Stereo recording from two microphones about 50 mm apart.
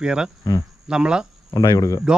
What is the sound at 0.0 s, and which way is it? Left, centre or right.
Speech, centre.